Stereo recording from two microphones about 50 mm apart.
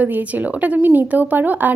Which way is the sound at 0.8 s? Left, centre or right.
Right.